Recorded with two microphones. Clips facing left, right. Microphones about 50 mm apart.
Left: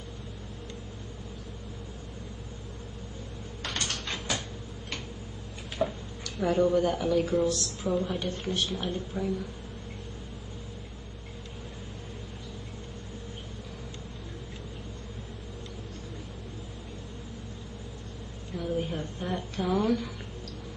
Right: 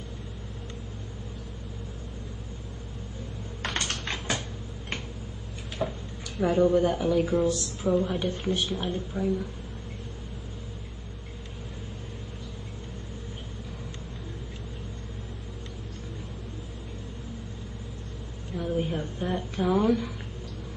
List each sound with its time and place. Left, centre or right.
3.6 s typing: right
5.8 s a woman's voice: centre
18.5 s a sound: centre